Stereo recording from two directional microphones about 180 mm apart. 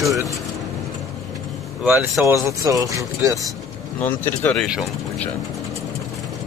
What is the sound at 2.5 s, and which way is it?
Speech, 20° right (ahead or behind).